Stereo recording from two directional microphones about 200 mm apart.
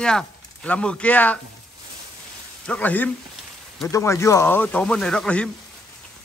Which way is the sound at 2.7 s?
5° left (ahead or behind).